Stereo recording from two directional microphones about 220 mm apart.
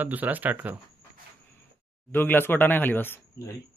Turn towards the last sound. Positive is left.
turn(degrees=10)  # may be behind; listen again after turning